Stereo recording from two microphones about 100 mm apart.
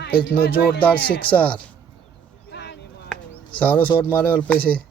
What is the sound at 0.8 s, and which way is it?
Speech, 15° left (ahead or behind).